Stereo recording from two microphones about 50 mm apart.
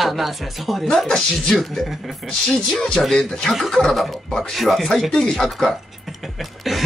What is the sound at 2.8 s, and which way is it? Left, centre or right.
Speech, centre.